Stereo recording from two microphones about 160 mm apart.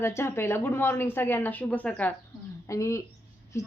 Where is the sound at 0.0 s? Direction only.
15° left (ahead or behind).